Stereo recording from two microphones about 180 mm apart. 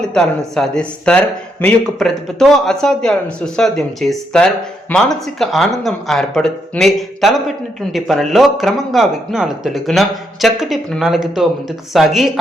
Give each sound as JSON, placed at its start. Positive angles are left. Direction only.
{"t": 0.0, "sound": "speech", "side_deg": 5}